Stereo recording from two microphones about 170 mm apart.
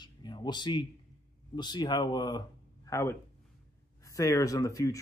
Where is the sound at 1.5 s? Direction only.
25° left (ahead or behind).